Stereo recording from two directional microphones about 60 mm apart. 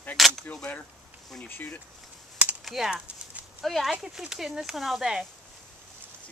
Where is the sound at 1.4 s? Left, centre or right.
Left.